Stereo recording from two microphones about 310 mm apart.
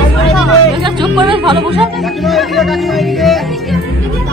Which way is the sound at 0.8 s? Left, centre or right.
Centre.